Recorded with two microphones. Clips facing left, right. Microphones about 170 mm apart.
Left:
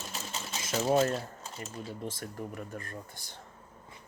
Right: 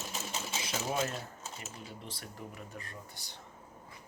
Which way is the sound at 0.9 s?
40° left (ahead or behind).